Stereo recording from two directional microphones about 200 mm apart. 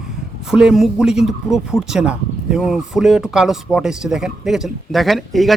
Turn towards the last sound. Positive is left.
turn(degrees=0)  # may be behind; listen again after turning